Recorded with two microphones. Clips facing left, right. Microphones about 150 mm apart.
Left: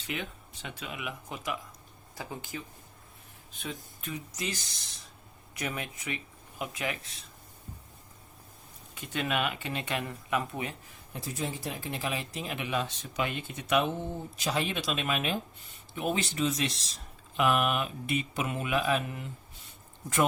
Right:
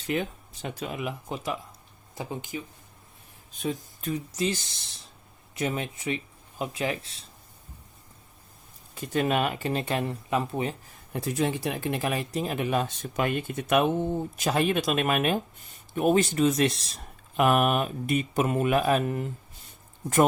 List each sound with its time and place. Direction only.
0.1 s speech: 40° right (ahead or behind)
2.1 s speech: 20° right (ahead or behind)
3.6 s speech: 40° right (ahead or behind)
9.0 s speech: 40° right (ahead or behind)
11.1 s speech: 70° right (ahead or behind); by 19.3 s 45° right (ahead or behind)